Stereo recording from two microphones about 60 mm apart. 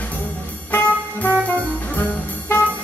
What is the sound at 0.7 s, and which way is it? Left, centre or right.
Music, left.